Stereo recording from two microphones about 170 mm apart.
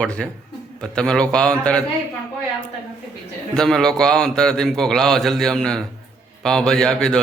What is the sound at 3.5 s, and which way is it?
A man's voice, 5° left (ahead or behind).